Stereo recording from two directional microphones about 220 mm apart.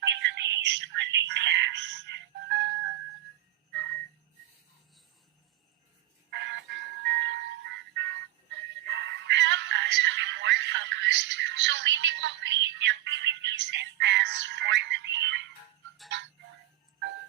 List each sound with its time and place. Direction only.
0.0 s a sound: 55° right (ahead or behind)
6.3 s music: 55° right (ahead or behind)
9.0 s music: 55° right (ahead or behind)